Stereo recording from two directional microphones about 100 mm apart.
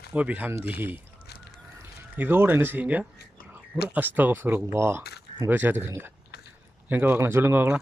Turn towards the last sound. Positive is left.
turn(degrees=-20)  # may be behind; listen again after turning